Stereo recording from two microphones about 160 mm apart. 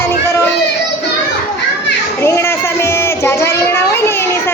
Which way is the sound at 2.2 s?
15° left (ahead or behind).